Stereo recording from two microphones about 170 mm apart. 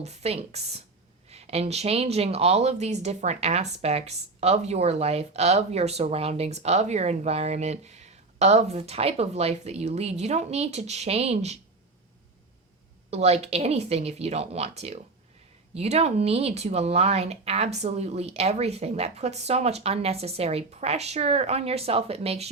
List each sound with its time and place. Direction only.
0.0 s speech: 40° right (ahead or behind)
13.1 s speech: 40° right (ahead or behind)